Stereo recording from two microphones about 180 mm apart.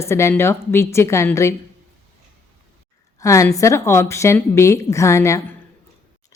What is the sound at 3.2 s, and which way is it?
A woman's voice, 15° left (ahead or behind).